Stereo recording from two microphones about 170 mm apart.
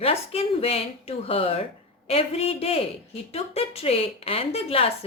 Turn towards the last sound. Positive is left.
turn(degrees=35)  # may be behind; listen again after turning